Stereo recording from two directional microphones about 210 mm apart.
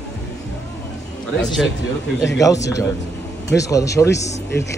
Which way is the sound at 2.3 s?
15° left (ahead or behind).